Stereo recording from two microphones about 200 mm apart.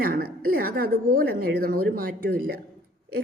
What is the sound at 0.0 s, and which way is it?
A woman's voice, 50° right (ahead or behind).